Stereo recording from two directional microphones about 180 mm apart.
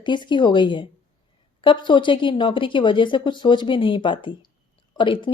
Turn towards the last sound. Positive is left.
turn(degrees=30)  # may be behind; listen again after turning